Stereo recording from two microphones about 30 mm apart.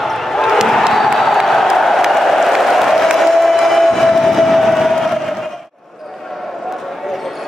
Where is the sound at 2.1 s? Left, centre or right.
Centre.